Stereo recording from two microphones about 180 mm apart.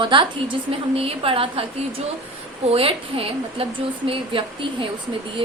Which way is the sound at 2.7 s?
30° right (ahead or behind).